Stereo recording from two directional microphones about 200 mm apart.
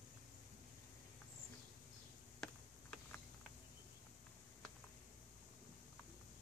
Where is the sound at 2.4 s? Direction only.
5° left (ahead or behind).